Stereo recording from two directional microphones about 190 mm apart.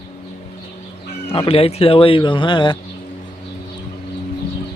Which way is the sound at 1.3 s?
30° left (ahead or behind).